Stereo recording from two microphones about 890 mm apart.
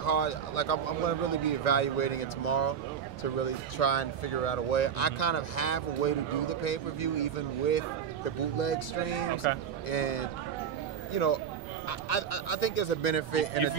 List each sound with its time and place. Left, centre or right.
0.0 s speech: left
9.5 s speech: left